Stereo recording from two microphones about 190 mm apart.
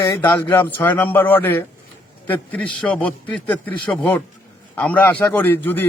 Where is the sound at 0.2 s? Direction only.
10° left (ahead or behind).